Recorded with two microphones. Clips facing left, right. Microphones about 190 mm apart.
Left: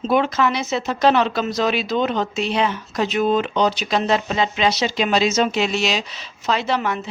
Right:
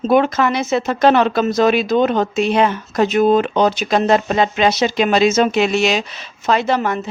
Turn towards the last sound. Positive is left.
turn(degrees=-45)  # may be behind; listen again after turning